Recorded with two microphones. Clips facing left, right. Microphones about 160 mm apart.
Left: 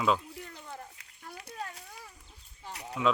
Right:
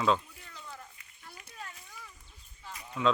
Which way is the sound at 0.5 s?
55° left (ahead or behind).